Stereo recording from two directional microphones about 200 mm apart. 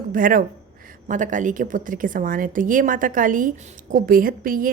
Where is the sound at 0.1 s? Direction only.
45° right (ahead or behind).